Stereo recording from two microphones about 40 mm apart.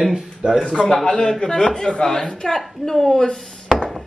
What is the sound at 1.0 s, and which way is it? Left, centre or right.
A woman's voice, left.